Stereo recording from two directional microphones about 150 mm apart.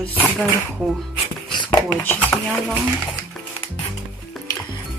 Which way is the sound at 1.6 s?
15° left (ahead or behind).